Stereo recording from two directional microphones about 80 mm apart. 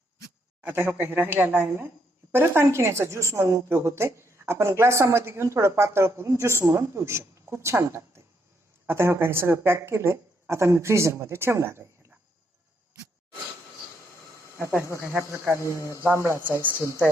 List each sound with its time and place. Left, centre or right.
0.6 s a woman's voice: right
14.8 s speech: left
16.0 s a woman's voice: right